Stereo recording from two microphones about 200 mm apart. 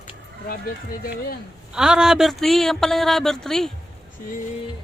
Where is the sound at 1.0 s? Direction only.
50° left (ahead or behind).